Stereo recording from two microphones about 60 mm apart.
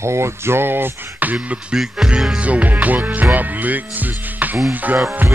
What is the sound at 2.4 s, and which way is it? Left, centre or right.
Speech, right.